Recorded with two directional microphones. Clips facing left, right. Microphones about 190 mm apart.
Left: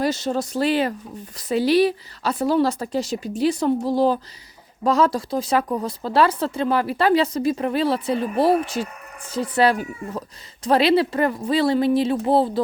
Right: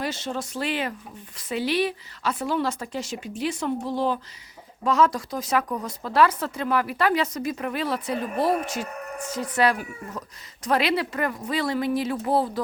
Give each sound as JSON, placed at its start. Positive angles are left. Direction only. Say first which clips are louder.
{"t": 0.0, "sound": "speech", "louder": "left 7 dB", "side_deg": 40}